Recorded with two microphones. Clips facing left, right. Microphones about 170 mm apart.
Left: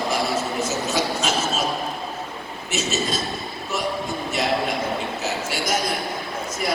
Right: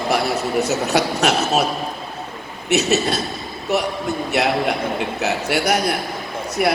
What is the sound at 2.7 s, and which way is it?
Speech, 65° right (ahead or behind).